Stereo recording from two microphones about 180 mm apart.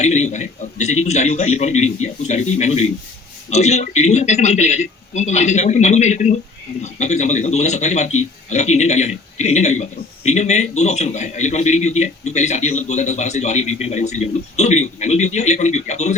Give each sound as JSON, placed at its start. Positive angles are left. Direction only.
{"t": 0.0, "sound": "a man's voice", "side_deg": 40}